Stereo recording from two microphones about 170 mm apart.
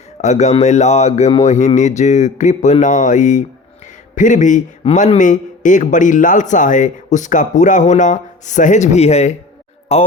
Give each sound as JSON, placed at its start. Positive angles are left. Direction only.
{"t": 0.2, "sound": "a man's voice", "side_deg": 45}